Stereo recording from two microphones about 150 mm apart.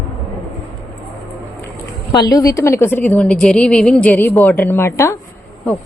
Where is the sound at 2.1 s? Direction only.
25° left (ahead or behind).